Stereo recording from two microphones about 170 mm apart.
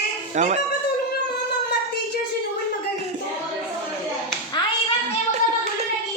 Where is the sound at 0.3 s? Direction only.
45° right (ahead or behind).